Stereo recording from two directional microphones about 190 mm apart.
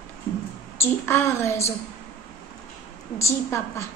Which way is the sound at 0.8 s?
15° left (ahead or behind).